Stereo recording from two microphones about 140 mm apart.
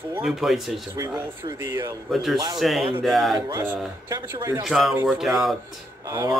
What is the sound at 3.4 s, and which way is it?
Speech, 30° right (ahead or behind).